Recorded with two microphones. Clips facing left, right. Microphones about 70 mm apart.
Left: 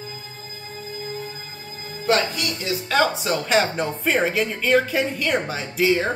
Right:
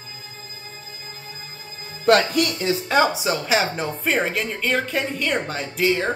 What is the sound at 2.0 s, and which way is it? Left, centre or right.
Speech, right.